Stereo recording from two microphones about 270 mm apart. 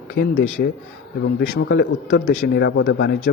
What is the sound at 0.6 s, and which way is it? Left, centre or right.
Speech, left.